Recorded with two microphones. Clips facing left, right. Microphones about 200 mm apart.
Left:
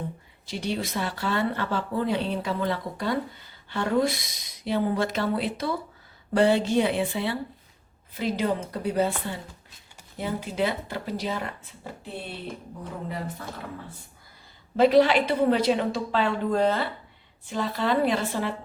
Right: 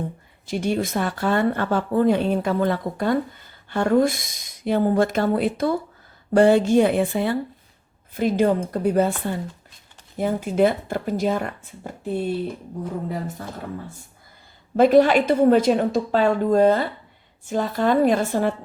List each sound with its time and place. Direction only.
0.4 s speech: 50° right (ahead or behind)
10.2 s speech: 50° right (ahead or behind)
14.8 s speech: 50° right (ahead or behind)